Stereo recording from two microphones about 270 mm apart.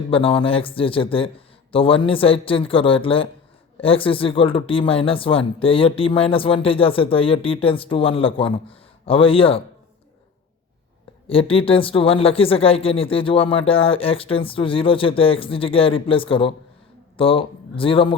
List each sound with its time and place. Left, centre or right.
0.1 s speech: centre
11.3 s speech: left